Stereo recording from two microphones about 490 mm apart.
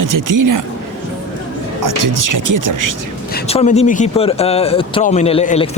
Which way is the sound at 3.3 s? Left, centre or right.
Centre.